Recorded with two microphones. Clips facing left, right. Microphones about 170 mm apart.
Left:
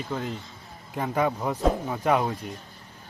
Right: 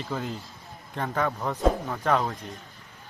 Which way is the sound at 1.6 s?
Centre (ahead or behind).